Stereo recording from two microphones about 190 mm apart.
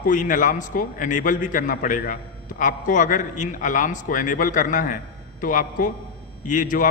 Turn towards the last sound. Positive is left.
turn(degrees=45)  # may be behind; listen again after turning